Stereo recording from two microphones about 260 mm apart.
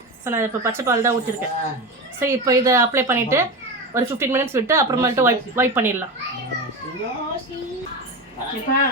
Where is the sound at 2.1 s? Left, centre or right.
Centre.